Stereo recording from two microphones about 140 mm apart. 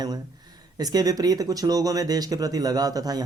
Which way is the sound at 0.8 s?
25° right (ahead or behind).